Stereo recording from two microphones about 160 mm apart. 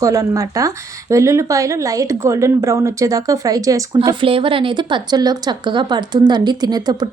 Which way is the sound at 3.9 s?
35° right (ahead or behind).